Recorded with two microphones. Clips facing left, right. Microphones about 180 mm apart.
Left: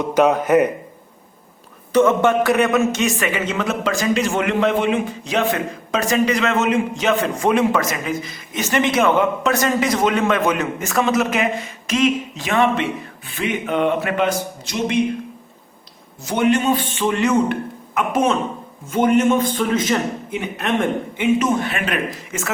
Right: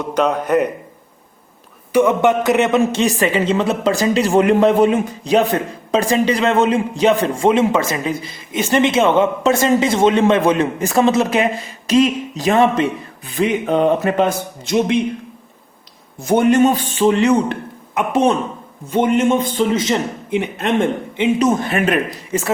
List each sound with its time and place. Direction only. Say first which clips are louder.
0.1 s a man's voice: left 1 dB; 5° left (ahead or behind)
1.9 s a man's voice: right 1 dB; 15° right (ahead or behind); by 14.3 s 40° right (ahead or behind)
14.3 s a man's voice: right 2 dB; 55° right (ahead or behind)
16.2 s a man's voice: right 5 dB; 50° right (ahead or behind); by 17.6 s 35° right (ahead or behind)
18.9 s a man's voice: right 1 dB; 30° right (ahead or behind)
21.6 s a man's voice: right 5 dB; 45° right (ahead or behind)